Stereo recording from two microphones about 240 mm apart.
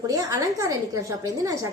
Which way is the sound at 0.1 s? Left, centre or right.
Centre.